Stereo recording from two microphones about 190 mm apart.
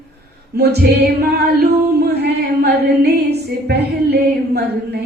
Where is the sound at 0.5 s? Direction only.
55° right (ahead or behind).